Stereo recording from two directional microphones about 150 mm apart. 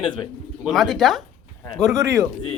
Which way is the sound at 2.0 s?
20° right (ahead or behind).